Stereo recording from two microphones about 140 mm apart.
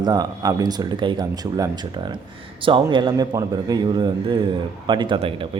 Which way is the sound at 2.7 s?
35° right (ahead or behind).